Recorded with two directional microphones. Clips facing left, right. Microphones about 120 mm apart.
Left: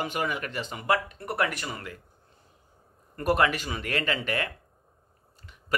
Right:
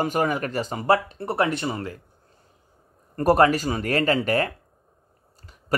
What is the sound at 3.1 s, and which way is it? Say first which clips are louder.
Speech: right 7 dB; 40° right (ahead or behind).